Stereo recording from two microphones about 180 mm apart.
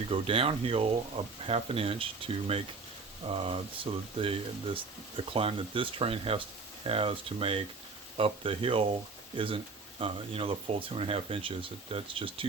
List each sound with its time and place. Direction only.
0.1 s speech: 30° right (ahead or behind)